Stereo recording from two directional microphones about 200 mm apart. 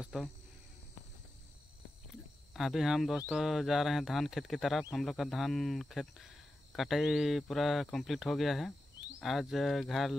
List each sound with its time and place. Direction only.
0.0 s speech: centre (ahead or behind)
2.5 s speech: centre (ahead or behind)